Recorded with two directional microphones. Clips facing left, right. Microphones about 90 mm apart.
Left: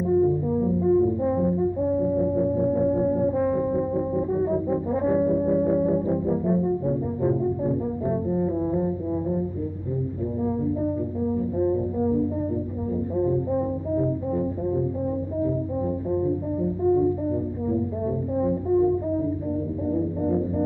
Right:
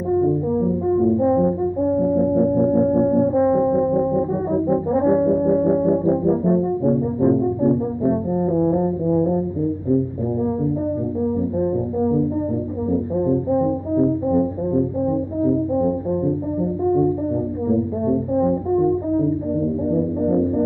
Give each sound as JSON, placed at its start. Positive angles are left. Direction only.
{"t": 0.6, "sound": "french horn", "side_deg": -25}
{"t": 2.0, "sound": "brass instrument", "side_deg": -30}
{"t": 11.5, "sound": "brass instrument", "side_deg": -25}
{"t": 13.2, "sound": "brass instrument", "side_deg": -25}
{"t": 17.6, "sound": "brass instrument", "side_deg": -25}
{"t": 19.9, "sound": "music", "side_deg": -30}